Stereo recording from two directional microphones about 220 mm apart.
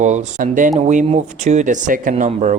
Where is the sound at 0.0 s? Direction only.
35° right (ahead or behind).